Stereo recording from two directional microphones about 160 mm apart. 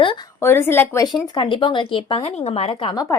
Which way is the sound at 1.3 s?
30° left (ahead or behind).